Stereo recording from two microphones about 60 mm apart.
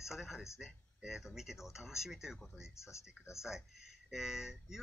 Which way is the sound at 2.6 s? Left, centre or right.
Left.